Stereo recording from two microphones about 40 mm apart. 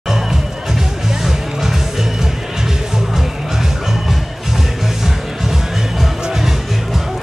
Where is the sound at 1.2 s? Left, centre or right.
Centre.